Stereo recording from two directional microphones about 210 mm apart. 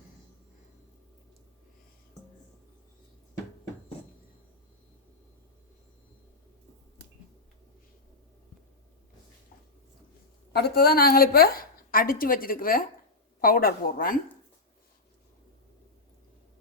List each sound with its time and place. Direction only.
10.5 s a woman's voice: 50° left (ahead or behind)